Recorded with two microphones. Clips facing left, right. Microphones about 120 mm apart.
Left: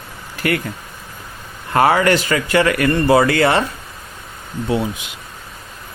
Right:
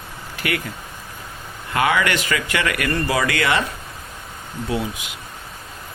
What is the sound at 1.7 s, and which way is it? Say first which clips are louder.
Speech: left 6 dB; 40° left (ahead or behind).